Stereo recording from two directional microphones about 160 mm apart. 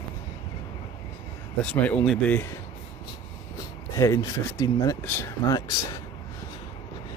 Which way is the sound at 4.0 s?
20° left (ahead or behind).